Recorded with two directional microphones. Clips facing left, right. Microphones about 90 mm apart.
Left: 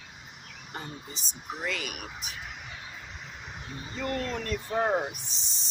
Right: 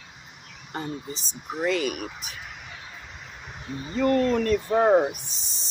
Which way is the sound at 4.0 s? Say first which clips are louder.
Right 11 dB; 65° right (ahead or behind).